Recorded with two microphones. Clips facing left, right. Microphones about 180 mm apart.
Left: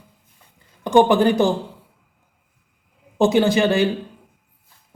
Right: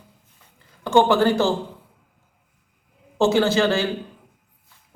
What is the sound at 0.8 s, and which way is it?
Speech, 15° left (ahead or behind).